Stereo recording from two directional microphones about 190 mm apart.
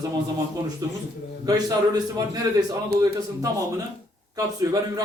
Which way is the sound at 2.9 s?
55° right (ahead or behind).